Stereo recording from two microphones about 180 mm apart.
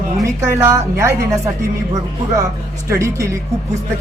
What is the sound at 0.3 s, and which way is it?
Speech, 15° right (ahead or behind).